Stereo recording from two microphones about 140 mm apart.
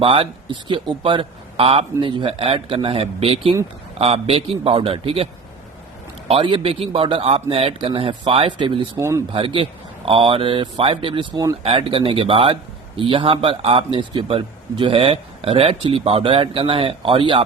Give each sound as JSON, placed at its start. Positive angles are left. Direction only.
{"t": 0.0, "sound": "a man's voice", "side_deg": -40}
{"t": 9.0, "sound": "speech", "side_deg": -20}
{"t": 9.3, "sound": "speech", "side_deg": -40}